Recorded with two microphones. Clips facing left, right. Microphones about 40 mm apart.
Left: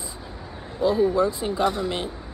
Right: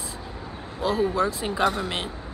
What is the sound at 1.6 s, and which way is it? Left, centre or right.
Speech, right.